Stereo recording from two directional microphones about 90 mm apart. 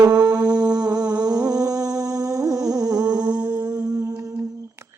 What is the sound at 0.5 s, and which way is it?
Music, 45° right (ahead or behind).